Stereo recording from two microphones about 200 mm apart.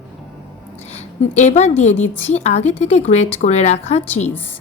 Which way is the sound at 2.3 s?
35° left (ahead or behind).